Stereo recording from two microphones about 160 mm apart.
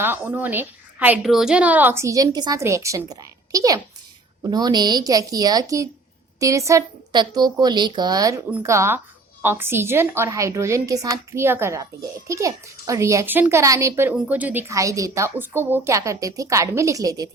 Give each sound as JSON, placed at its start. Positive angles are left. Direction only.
{"t": 0.0, "sound": "a woman's voice", "side_deg": -15}